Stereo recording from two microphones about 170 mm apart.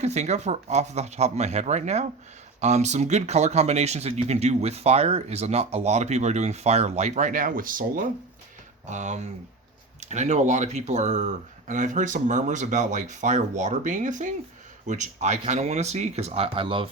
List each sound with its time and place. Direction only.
0.0 s speech: 40° right (ahead or behind)